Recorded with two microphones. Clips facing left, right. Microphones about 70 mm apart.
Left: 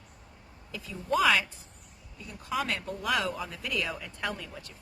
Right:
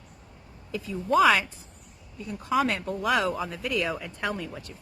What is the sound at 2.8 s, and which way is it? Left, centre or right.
Speech, right.